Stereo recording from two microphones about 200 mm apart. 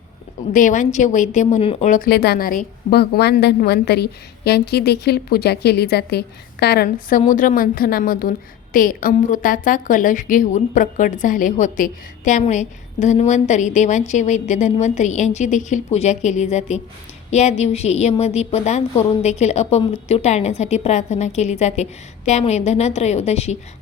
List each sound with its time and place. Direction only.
0.5 s a woman's voice: 40° left (ahead or behind)